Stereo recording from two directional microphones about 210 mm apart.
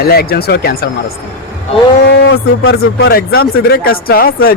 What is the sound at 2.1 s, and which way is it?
Speech, 60° left (ahead or behind).